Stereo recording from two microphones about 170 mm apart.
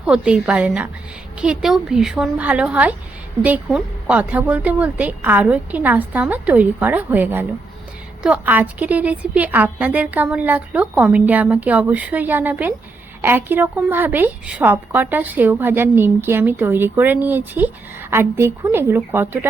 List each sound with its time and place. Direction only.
0.0 s a woman's voice: 5° right (ahead or behind)